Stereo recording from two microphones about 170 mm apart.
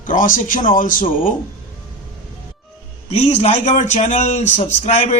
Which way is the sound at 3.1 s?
40° left (ahead or behind).